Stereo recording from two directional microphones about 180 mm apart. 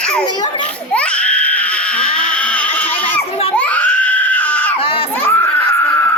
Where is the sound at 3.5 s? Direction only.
10° left (ahead or behind).